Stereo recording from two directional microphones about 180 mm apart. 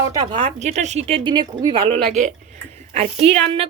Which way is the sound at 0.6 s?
40° right (ahead or behind).